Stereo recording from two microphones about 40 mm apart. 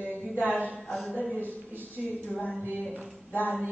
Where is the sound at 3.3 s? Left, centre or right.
Left.